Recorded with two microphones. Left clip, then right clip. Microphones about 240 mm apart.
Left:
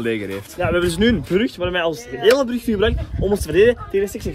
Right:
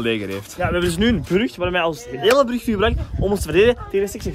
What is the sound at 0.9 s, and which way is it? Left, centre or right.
A man's voice, centre.